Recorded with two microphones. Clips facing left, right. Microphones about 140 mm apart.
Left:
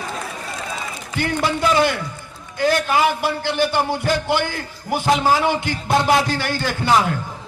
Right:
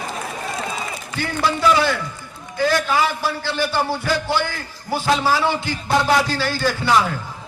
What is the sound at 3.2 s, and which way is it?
Speech, 55° left (ahead or behind).